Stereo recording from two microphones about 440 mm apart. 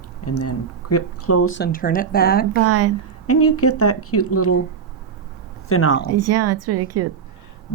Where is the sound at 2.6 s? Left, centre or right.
Right.